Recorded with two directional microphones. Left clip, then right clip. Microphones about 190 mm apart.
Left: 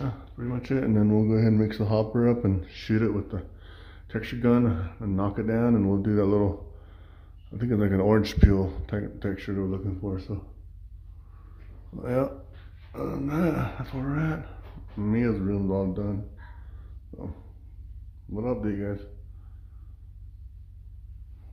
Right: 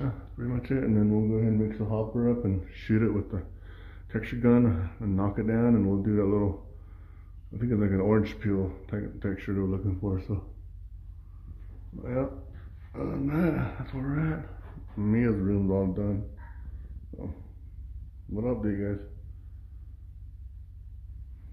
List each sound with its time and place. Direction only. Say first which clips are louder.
0.0 s speech: left 1 dB; 5° left (ahead or behind); by 2.5 s 35° left (ahead or behind)
2.5 s speech: left 1 dB; 10° left (ahead or behind)
9.3 s speech: even; centre (ahead or behind)
9.8 s speech: even; 10° right (ahead or behind)
12.0 s speech: left 5 dB; 20° left (ahead or behind)
12.9 s speech: left 1 dB; 5° left (ahead or behind)
18.3 s speech: left 1 dB; 5° left (ahead or behind)